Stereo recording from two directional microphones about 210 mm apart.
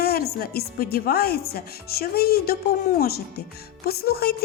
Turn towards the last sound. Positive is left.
turn(degrees=45)  # may be behind; listen again after turning